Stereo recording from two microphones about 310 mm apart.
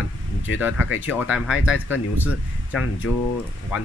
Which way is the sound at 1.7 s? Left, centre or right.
Left.